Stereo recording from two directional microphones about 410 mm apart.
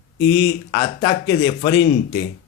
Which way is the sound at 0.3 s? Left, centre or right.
Centre.